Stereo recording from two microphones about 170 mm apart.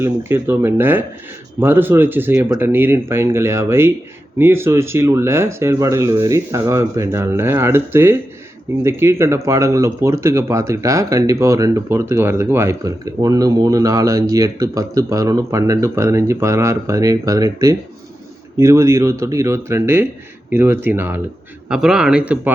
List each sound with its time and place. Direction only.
0.0 s speech: 15° right (ahead or behind)